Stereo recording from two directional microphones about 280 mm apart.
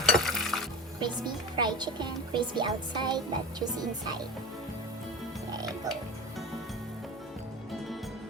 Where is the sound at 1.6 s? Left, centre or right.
Centre.